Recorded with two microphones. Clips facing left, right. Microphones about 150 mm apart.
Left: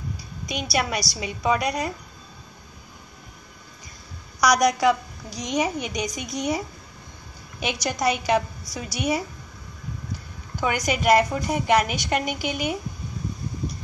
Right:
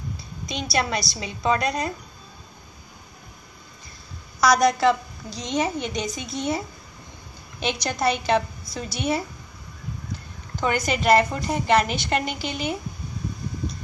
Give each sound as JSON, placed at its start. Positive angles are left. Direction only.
{"t": 0.5, "sound": "a woman's voice", "side_deg": 15}
{"t": 4.4, "sound": "a woman's voice", "side_deg": 15}
{"t": 7.6, "sound": "a woman's voice", "side_deg": 10}
{"t": 10.5, "sound": "a woman's voice", "side_deg": 10}